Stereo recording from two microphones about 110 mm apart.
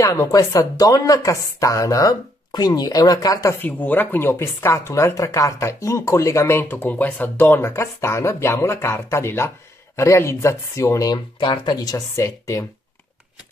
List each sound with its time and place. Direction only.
0.0 s speech: 30° left (ahead or behind)
3.6 s speech: 15° left (ahead or behind)
11.3 s speech: 45° left (ahead or behind); by 12.6 s 30° left (ahead or behind)